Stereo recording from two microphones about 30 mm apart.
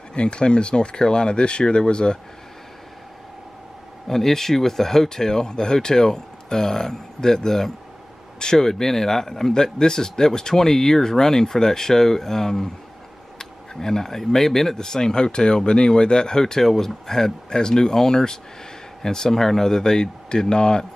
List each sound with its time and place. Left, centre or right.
0.1 s speech: left
4.1 s speech: centre
14.8 s speech: left